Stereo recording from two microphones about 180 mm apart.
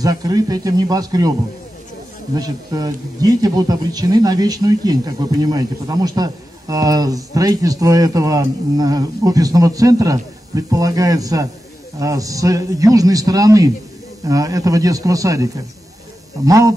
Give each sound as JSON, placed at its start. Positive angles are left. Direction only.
{"t": 0.0, "sound": "speech", "side_deg": -20}
{"t": 2.3, "sound": "speech", "side_deg": -20}